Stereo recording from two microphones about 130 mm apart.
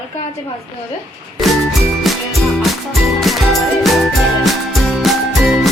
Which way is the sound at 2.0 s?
Centre (ahead or behind).